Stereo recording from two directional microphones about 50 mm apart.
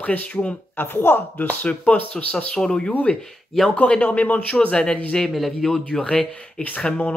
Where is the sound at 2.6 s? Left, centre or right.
Centre.